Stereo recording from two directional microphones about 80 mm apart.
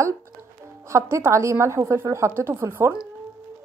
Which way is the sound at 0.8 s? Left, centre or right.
Right.